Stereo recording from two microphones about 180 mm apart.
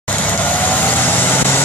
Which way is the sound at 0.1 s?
10° left (ahead or behind).